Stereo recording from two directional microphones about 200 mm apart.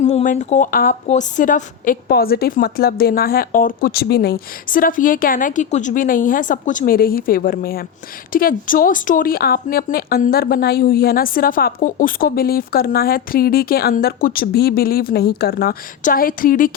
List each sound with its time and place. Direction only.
0.0 s speech: 35° left (ahead or behind)